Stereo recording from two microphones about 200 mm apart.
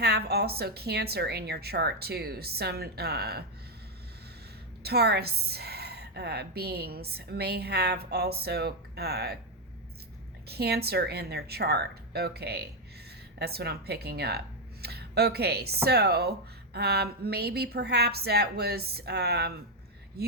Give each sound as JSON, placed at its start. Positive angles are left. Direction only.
{"t": 0.0, "sound": "a woman's voice", "side_deg": -55}
{"t": 4.8, "sound": "a woman's voice", "side_deg": -55}
{"t": 10.5, "sound": "a woman's voice", "side_deg": -55}